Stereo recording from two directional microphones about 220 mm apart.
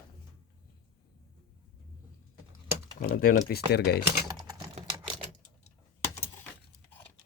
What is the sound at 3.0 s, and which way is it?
Speech, 40° left (ahead or behind).